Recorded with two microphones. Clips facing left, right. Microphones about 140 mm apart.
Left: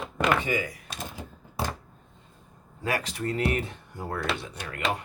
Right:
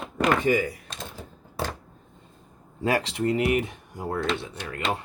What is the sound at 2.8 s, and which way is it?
Speech, 25° right (ahead or behind).